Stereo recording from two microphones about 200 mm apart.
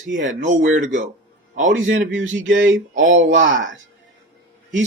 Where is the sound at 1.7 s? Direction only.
70° right (ahead or behind).